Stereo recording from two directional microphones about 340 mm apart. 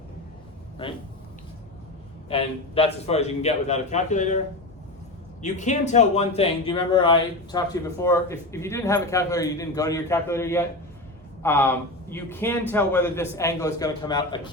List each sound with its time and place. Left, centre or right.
2.3 s a man's voice: centre
5.4 s speech: left